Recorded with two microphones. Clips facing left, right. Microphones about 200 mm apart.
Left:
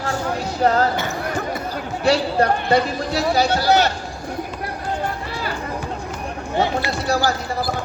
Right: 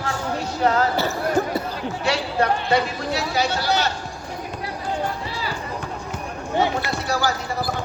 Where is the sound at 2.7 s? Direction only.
35° left (ahead or behind).